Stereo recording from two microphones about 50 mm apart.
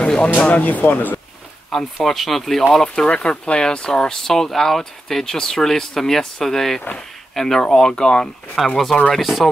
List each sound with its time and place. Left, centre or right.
0.0 s a sound: left
0.4 s speech: left
1.7 s speech: centre
3.1 s speech: left
8.6 s speech: centre